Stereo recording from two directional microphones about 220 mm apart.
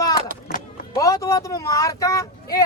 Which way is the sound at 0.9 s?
15° left (ahead or behind).